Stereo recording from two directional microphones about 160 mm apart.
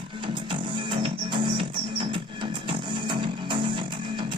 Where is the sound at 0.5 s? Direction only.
30° right (ahead or behind).